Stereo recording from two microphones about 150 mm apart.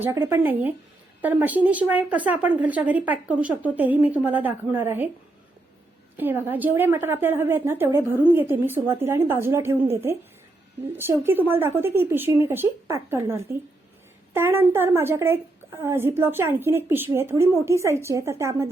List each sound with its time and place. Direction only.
0.0 s speech: 15° right (ahead or behind)
6.1 s speech: 15° right (ahead or behind)